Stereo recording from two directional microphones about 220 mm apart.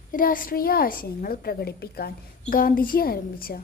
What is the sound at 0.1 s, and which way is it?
A woman's voice, 40° left (ahead or behind).